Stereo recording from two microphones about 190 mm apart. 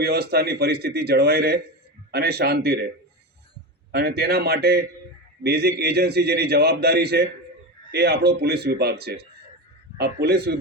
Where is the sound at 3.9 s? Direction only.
55° right (ahead or behind).